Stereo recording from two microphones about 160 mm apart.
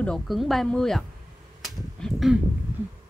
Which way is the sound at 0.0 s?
Centre (ahead or behind).